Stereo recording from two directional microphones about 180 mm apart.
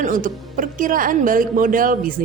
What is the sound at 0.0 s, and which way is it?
Speech, 50° right (ahead or behind).